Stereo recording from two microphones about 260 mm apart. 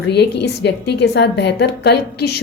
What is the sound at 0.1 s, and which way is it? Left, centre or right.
A woman's voice, left.